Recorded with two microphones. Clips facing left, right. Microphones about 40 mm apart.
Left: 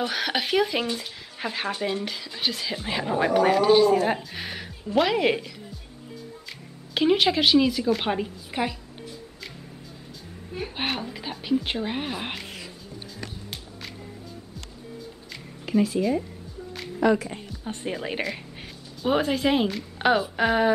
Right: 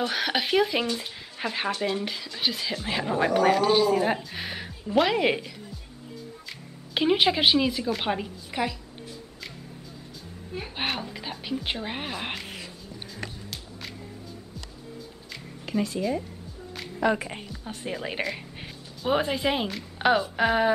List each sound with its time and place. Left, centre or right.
0.0 s speech: centre
6.9 s a woman's voice: centre
10.5 s a woman's voice: centre
15.6 s speech: centre
16.7 s music: centre
17.2 s a woman's voice: right
17.5 s speech: centre